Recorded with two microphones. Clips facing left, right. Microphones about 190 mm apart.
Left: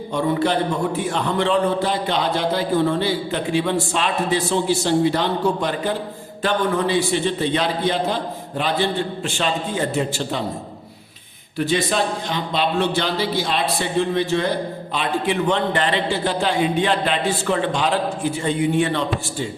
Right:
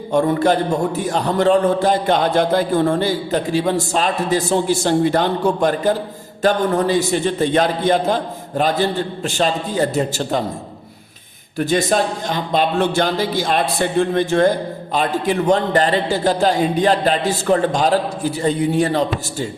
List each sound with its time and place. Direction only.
0.1 s a man's voice: 45° right (ahead or behind)
11.5 s a man's voice: 45° right (ahead or behind)